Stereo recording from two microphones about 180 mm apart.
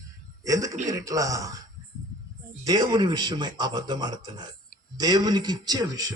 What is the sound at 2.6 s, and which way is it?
A man's voice, 20° right (ahead or behind).